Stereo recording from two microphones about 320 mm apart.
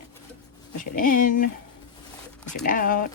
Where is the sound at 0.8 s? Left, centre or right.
Left.